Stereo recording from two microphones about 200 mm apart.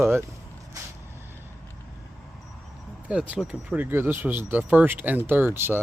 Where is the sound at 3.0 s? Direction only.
5° right (ahead or behind).